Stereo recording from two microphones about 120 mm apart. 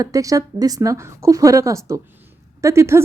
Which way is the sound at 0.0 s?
30° right (ahead or behind).